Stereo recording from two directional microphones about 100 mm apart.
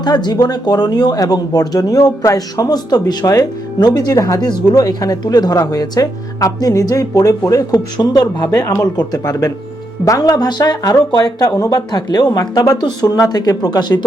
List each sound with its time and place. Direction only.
0.0 s speech: 45° left (ahead or behind)